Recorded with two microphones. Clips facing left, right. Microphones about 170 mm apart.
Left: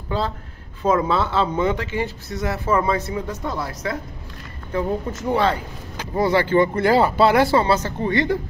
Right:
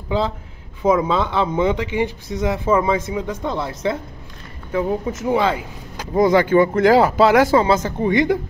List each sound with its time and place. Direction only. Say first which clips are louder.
0.8 s speech: right 2 dB; 15° right (ahead or behind)
4.7 s speech: right 3 dB; 10° right (ahead or behind)